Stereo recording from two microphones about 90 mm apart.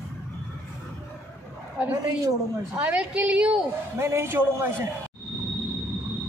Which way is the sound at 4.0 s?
30° right (ahead or behind).